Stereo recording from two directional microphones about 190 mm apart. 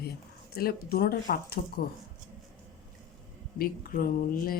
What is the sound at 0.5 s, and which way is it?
A woman's voice, 55° left (ahead or behind).